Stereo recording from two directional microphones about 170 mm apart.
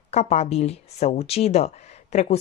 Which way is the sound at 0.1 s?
40° left (ahead or behind).